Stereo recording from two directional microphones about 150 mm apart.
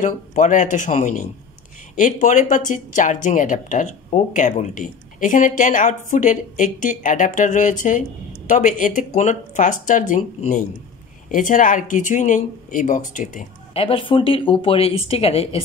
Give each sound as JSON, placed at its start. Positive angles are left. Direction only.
{"t": 0.0, "sound": "speech", "side_deg": 55}
{"t": 13.7, "sound": "speech", "side_deg": 40}